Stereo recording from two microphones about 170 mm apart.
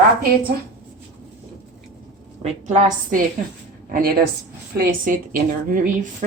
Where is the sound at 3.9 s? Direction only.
55° right (ahead or behind).